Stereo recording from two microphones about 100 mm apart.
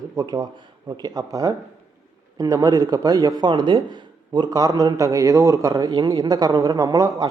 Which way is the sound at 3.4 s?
45° right (ahead or behind).